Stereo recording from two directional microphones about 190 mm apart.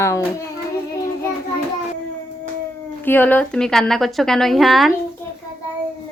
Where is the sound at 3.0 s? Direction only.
10° left (ahead or behind).